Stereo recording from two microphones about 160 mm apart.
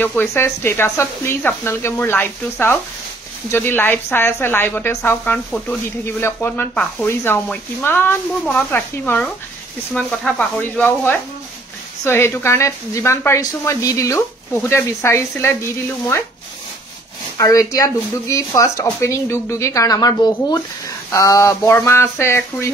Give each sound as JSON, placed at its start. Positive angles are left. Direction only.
{"t": 0.0, "sound": "speech", "side_deg": 15}
{"t": 17.4, "sound": "speech", "side_deg": 20}